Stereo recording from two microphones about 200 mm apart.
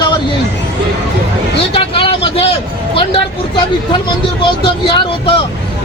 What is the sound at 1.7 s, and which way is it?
Speech, 25° left (ahead or behind).